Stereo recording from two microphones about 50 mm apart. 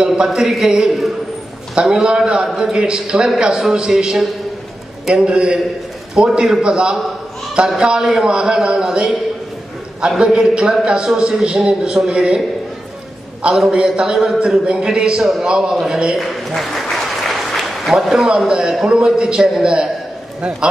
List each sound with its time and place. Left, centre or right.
0.0 s a sound: centre
0.4 s a man's voice: centre
8.0 s speech: centre
8.3 s a man's voice: centre
13.6 s a man's voice: centre
16.2 s applause: centre
18.0 s a man's voice: centre